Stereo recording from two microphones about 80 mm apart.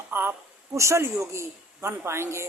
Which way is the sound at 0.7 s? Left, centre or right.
Right.